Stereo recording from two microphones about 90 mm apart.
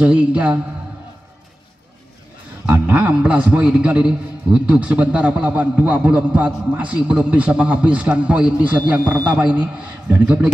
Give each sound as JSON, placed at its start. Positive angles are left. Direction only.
{"t": 0.0, "sound": "a man's voice", "side_deg": -15}
{"t": 2.7, "sound": "a man's voice", "side_deg": -20}